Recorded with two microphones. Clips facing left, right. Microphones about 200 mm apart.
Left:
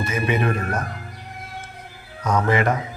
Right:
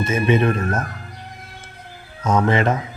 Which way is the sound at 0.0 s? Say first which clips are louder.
Right 5 dB; 25° right (ahead or behind).